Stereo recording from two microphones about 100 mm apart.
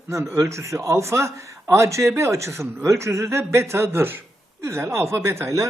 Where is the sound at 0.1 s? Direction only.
30° right (ahead or behind).